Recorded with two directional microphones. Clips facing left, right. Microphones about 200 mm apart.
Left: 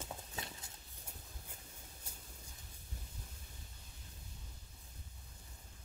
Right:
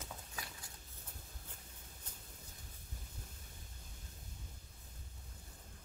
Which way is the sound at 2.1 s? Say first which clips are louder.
Left 1 dB; 10° left (ahead or behind).